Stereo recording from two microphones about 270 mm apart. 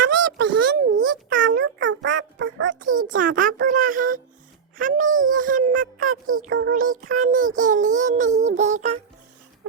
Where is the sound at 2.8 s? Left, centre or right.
Right.